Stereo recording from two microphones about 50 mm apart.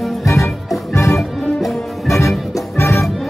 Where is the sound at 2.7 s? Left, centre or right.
Left.